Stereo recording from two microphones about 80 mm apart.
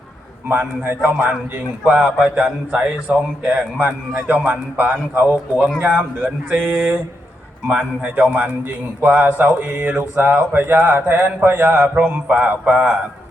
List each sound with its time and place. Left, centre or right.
0.4 s a man's voice: right
10.0 s a man's voice: right